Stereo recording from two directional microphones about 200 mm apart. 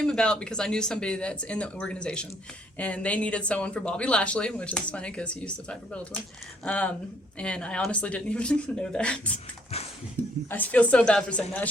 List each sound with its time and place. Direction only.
0.0 s speech: 5° left (ahead or behind)
10.2 s a sound: 10° left (ahead or behind)
10.5 s speech: 5° left (ahead or behind)